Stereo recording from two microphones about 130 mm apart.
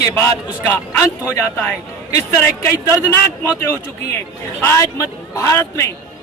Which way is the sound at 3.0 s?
20° left (ahead or behind).